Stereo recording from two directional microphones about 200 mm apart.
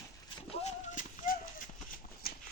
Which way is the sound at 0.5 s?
35° left (ahead or behind).